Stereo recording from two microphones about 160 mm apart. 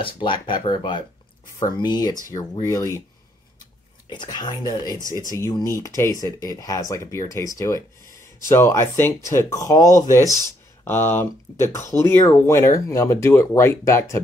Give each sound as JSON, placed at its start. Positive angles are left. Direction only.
{"t": 0.0, "sound": "speech", "side_deg": 30}
{"t": 4.1, "sound": "speech", "side_deg": 25}